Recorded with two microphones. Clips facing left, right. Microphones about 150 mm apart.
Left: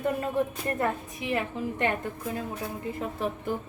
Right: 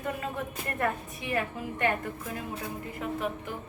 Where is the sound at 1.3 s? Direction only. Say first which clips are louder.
Left 2 dB; 25° left (ahead or behind).